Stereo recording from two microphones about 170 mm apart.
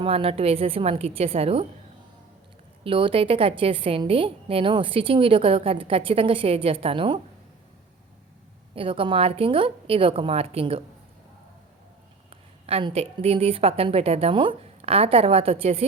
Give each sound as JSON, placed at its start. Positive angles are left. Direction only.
{"t": 0.0, "sound": "a woman's voice", "side_deg": -35}
{"t": 2.8, "sound": "a woman's voice", "side_deg": -30}
{"t": 8.7, "sound": "a woman's voice", "side_deg": -30}
{"t": 12.6, "sound": "a woman's voice", "side_deg": -35}